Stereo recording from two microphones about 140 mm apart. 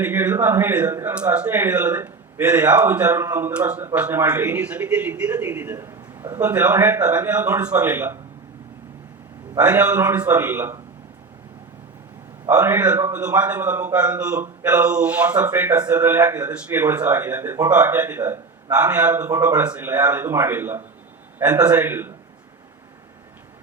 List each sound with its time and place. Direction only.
0.0 s speech: 15° right (ahead or behind)
9.6 s speech: 10° right (ahead or behind)
12.5 s speech: 15° right (ahead or behind)